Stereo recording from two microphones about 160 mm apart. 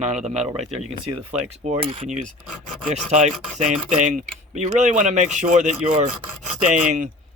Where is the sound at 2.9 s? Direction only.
45° right (ahead or behind).